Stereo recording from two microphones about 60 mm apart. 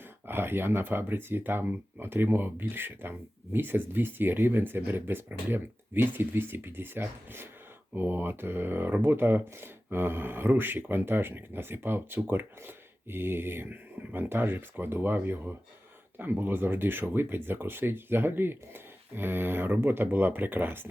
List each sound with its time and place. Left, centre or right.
0.0 s speech: right